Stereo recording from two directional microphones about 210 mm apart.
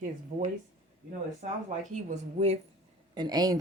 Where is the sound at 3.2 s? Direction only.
20° right (ahead or behind).